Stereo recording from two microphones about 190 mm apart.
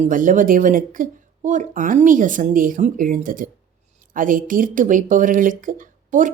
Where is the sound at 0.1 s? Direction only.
45° right (ahead or behind).